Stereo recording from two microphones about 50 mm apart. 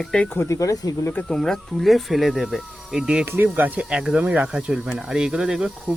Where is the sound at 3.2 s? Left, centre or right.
Right.